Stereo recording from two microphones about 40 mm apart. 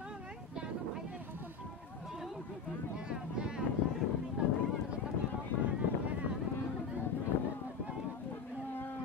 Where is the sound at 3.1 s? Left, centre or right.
Right.